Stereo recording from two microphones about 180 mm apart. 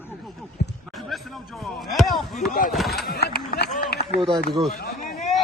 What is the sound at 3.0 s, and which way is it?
Speech, 60° left (ahead or behind).